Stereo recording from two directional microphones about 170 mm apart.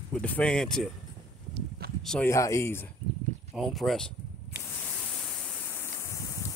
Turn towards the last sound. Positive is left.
turn(degrees=15)  # may be behind; listen again after turning